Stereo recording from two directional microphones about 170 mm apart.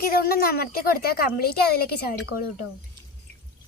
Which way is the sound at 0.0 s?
60° left (ahead or behind).